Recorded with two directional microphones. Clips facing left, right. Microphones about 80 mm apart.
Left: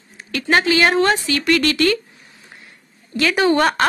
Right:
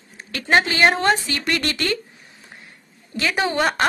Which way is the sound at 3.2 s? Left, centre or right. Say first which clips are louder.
Left 5 dB; centre.